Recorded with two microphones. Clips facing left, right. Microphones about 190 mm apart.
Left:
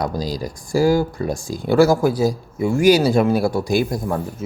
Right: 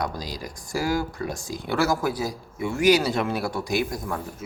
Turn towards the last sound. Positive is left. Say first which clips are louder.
# left 7 dB
turn(degrees=30)  # may be behind; listen again after turning